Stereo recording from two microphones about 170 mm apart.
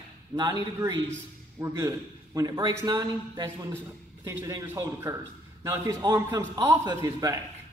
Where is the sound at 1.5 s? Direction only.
20° right (ahead or behind).